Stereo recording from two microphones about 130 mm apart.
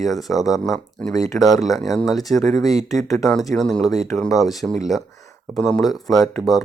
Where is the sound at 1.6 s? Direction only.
25° left (ahead or behind).